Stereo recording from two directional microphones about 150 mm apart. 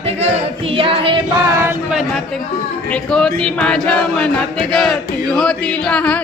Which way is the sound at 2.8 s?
5° left (ahead or behind).